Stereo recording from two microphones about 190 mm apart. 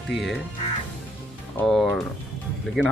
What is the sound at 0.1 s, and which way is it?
Speech, centre (ahead or behind).